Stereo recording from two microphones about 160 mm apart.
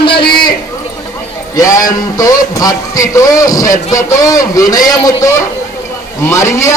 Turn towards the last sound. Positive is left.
turn(degrees=20)  # may be behind; listen again after turning